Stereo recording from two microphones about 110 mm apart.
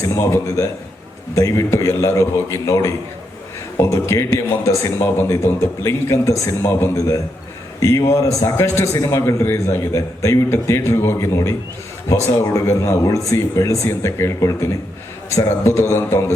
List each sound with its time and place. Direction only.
0.0 s a man's voice: 25° left (ahead or behind)